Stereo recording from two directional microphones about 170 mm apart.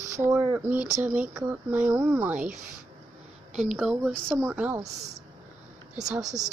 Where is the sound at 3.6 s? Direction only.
Centre (ahead or behind).